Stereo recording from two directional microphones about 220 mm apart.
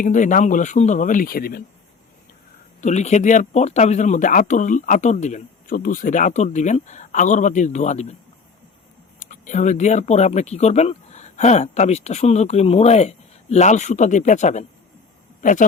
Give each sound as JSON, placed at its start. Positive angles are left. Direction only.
{"t": 0.0, "sound": "speech", "side_deg": 35}
{"t": 2.8, "sound": "speech", "side_deg": 30}
{"t": 9.1, "sound": "speech", "side_deg": 35}